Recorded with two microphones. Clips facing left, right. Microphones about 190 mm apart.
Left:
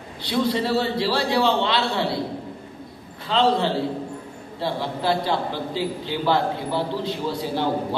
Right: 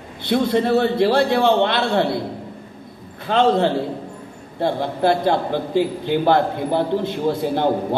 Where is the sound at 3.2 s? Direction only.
50° right (ahead or behind).